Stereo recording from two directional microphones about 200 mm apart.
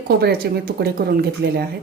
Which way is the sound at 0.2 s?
50° right (ahead or behind).